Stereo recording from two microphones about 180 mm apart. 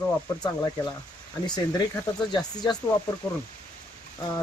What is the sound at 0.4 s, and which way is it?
Speech, 25° left (ahead or behind).